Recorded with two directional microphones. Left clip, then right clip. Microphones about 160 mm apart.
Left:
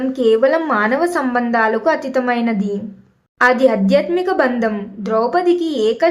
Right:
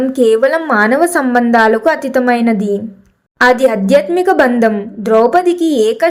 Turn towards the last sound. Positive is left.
turn(degrees=-30)  # may be behind; listen again after turning